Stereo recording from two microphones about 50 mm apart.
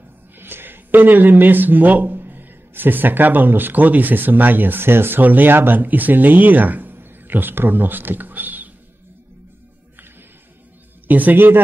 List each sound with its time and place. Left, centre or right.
0.4 s speech: right
11.1 s a man's voice: right